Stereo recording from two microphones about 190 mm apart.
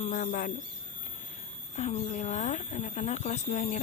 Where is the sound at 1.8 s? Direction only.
35° left (ahead or behind).